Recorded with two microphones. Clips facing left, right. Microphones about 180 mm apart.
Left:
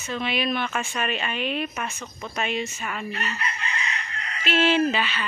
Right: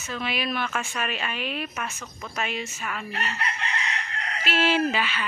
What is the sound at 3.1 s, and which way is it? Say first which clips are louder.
Chicken: even; 70° right (ahead or behind).